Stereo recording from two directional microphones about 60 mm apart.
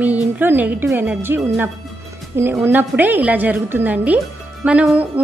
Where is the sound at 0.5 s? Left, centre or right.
Right.